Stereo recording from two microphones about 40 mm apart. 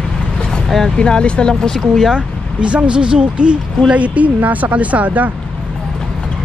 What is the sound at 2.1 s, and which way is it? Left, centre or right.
Speech, right.